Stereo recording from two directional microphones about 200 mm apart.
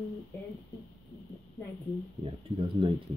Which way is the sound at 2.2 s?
25° right (ahead or behind).